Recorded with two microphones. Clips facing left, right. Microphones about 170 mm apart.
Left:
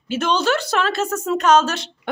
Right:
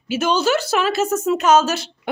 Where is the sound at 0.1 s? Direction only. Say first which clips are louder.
Right 1 dB; 5° right (ahead or behind).